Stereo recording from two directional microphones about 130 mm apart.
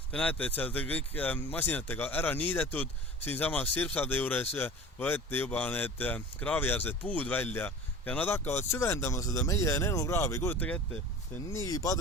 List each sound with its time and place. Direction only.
0.1 s speech: 10° left (ahead or behind)
11.5 s speech: 25° left (ahead or behind)